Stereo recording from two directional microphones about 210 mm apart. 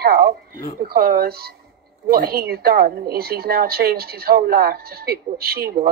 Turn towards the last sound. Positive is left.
turn(degrees=-45)  # may be behind; listen again after turning